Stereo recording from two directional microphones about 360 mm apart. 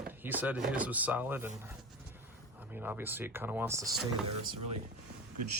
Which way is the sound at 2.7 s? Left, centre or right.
Centre.